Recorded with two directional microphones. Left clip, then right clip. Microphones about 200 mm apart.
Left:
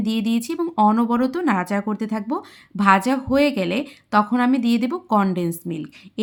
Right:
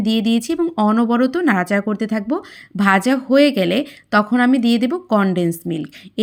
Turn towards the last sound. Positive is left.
turn(degrees=-15)  # may be behind; listen again after turning